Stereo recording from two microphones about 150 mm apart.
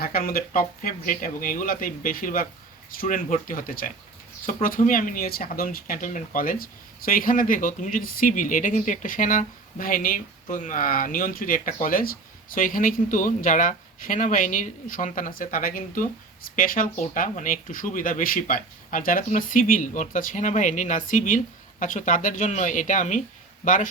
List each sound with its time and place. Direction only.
0.0 s speech: 75° left (ahead or behind)